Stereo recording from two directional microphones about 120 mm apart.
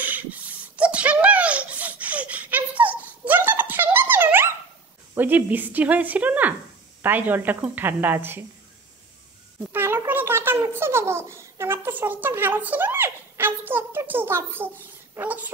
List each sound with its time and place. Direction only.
0.0 s a sound: 15° right (ahead or behind)
5.1 s a woman's voice: 15° right (ahead or behind)
9.7 s a woman's voice: 20° right (ahead or behind)